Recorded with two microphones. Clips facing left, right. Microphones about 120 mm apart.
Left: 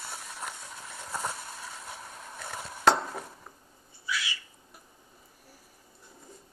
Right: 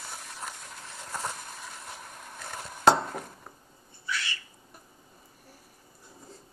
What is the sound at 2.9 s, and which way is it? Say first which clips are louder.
Cutlery: right 2 dB; 5° right (ahead or behind).